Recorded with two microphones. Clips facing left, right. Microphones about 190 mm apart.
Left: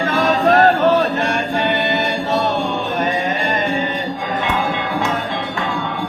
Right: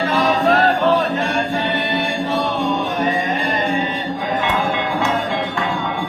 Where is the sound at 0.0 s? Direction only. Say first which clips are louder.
Left 1 dB; 50° left (ahead or behind).